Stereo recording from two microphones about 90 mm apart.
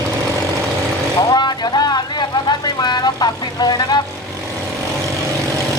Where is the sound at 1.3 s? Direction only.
50° left (ahead or behind).